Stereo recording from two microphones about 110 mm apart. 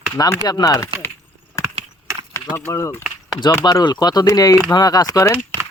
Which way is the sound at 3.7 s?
40° left (ahead or behind).